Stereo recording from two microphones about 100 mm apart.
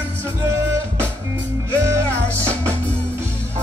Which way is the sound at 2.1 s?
15° left (ahead or behind).